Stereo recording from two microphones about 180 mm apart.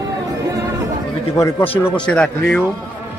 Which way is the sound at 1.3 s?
15° left (ahead or behind).